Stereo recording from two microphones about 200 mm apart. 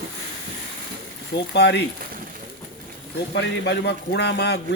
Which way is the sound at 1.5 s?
60° left (ahead or behind).